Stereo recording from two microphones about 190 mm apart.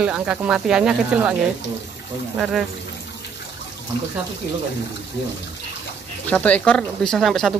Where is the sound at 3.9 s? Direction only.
65° left (ahead or behind).